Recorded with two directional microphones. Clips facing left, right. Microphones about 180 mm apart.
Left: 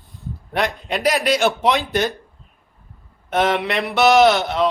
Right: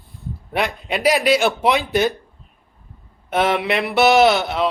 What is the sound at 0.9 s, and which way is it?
Speech, centre (ahead or behind).